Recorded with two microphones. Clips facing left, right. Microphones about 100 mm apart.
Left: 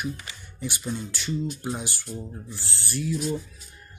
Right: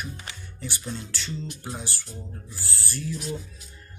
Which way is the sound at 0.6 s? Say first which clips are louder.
Left 4 dB; 15° left (ahead or behind).